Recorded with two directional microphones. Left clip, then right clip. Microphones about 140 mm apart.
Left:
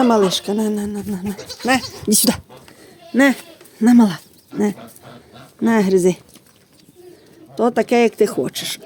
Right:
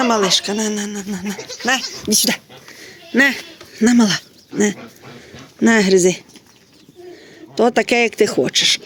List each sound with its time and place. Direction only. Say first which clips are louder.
0.0 s speech: even; 55° left (ahead or behind)
1.3 s speech: even; 40° left (ahead or behind)
2.0 s speech: right 1 dB; 60° left (ahead or behind)
3.8 s speech: even; 15° left (ahead or behind)
5.5 s speech: right 3 dB; 10° left (ahead or behind)
7.5 s speech: right 1 dB; 5° left (ahead or behind)